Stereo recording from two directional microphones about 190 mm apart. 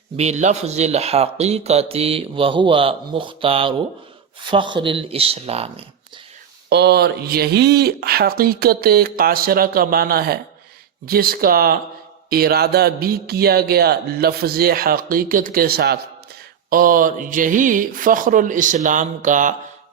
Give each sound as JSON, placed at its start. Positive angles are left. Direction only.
{"t": 0.2, "sound": "speech", "side_deg": -35}
{"t": 6.7, "sound": "speech", "side_deg": -60}